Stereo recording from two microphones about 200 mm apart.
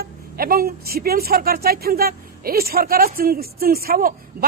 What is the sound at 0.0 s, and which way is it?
A woman's voice, 45° right (ahead or behind).